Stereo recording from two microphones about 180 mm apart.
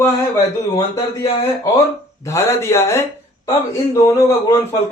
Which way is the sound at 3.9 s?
15° left (ahead or behind).